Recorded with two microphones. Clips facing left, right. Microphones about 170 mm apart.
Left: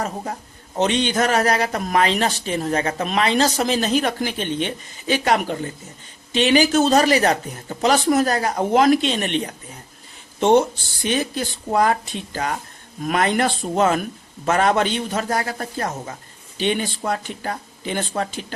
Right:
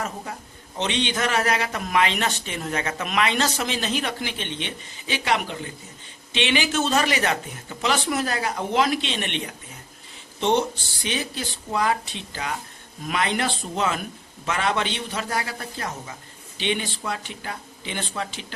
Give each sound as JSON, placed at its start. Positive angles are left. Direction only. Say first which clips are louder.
{"t": 0.8, "sound": "speech", "louder": "left 6 dB", "side_deg": 45}
{"t": 11.0, "sound": "speech", "louder": "left 6 dB", "side_deg": 45}